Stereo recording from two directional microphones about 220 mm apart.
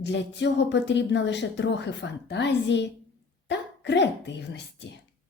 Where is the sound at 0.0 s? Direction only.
50° left (ahead or behind).